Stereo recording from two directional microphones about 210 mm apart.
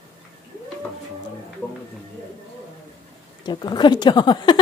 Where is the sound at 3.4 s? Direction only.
20° left (ahead or behind).